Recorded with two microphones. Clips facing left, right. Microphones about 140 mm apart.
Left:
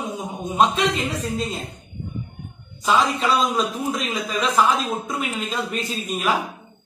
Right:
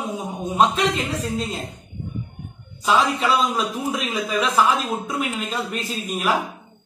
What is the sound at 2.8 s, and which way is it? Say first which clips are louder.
A man's voice: even; 5° right (ahead or behind).